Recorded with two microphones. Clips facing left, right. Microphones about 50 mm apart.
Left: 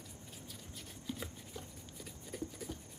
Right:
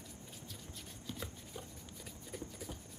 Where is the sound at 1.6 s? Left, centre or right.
Centre.